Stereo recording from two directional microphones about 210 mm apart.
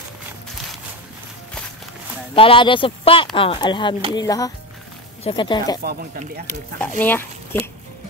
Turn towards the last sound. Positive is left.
turn(degrees=10)  # may be behind; listen again after turning